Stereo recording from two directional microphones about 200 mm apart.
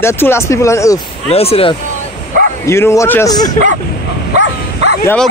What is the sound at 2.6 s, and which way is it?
Speech, 15° left (ahead or behind).